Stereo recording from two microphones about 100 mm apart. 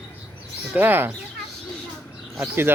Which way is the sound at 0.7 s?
20° right (ahead or behind).